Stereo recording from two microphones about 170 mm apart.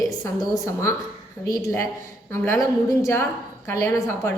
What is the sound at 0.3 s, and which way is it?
A woman's voice, 20° left (ahead or behind).